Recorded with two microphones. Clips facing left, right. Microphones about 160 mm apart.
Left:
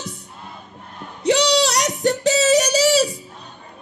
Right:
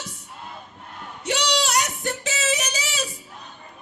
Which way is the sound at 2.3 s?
35° left (ahead or behind).